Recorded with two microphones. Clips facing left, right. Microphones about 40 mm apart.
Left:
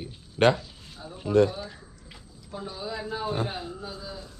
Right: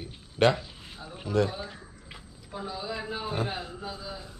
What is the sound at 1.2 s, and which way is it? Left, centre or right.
Speech, left.